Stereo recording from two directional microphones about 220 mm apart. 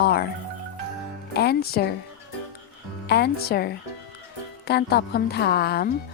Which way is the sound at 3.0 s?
50° left (ahead or behind).